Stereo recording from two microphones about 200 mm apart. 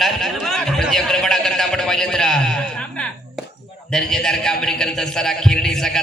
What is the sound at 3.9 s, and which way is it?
A man's voice, centre (ahead or behind).